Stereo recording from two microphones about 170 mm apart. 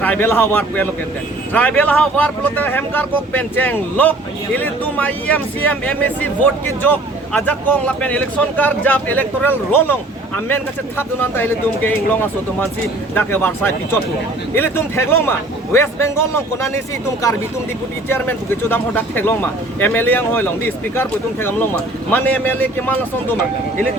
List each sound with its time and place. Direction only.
0.0 s speech: 10° left (ahead or behind)
18.1 s speech: 10° left (ahead or behind)